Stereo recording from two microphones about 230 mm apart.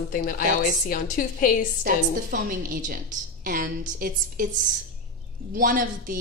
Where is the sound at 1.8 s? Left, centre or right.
Right.